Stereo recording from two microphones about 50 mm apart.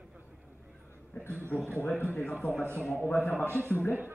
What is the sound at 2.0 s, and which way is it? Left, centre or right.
A man's voice, left.